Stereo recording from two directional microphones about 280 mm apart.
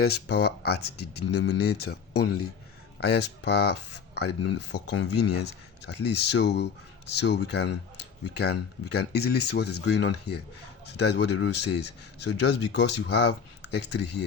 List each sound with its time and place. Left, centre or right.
0.0 s speech: left
8.9 s speech: left